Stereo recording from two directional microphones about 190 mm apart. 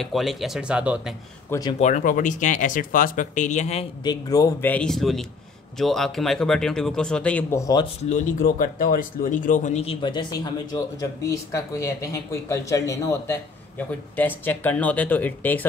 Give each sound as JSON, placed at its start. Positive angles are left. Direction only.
{"t": 0.0, "sound": "speech", "side_deg": 0}
{"t": 1.5, "sound": "speech", "side_deg": 20}
{"t": 1.8, "sound": "speech", "side_deg": 40}
{"t": 4.0, "sound": "speech", "side_deg": 20}
{"t": 7.6, "sound": "speech", "side_deg": 20}
{"t": 8.0, "sound": "speech", "side_deg": 40}